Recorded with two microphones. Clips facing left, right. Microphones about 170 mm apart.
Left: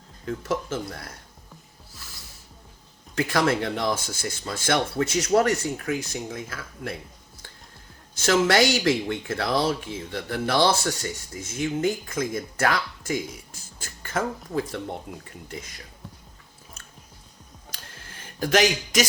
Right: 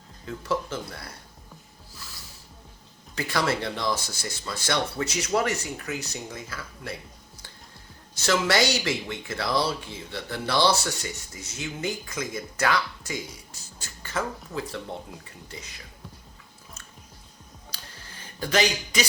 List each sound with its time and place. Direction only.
0.3 s speech: 50° left (ahead or behind)
3.2 s speech: 50° left (ahead or behind)
8.1 s speech: 50° left (ahead or behind)
18.3 s speech: 50° left (ahead or behind)